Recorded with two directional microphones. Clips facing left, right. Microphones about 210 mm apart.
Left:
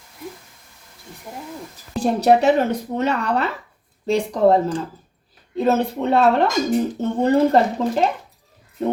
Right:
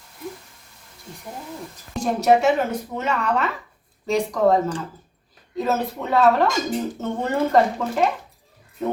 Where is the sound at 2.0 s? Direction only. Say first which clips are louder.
Left 2 dB; 35° left (ahead or behind).